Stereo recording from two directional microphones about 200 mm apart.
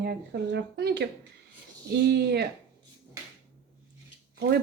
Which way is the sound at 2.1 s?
55° right (ahead or behind).